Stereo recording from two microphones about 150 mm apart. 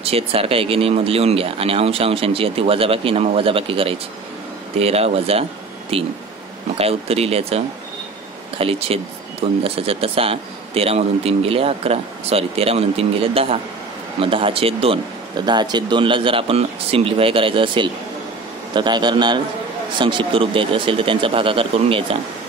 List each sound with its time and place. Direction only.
0.0 s a man's voice: 40° right (ahead or behind)